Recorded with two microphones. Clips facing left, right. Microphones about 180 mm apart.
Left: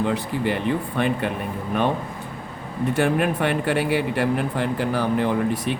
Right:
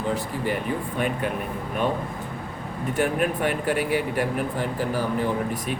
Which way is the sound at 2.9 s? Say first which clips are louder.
Left 2 dB; 80° left.